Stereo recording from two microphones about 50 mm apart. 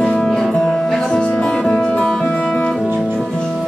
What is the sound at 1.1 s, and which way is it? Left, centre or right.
Music, left.